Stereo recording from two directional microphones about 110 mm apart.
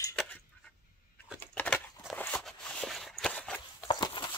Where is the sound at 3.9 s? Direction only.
40° left (ahead or behind).